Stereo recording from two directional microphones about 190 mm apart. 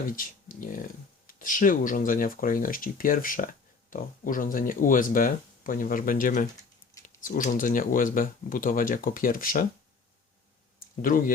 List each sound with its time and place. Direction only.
0.2 s speech: 45° left (ahead or behind)